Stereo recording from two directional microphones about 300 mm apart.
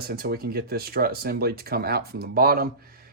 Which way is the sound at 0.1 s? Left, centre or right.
Right.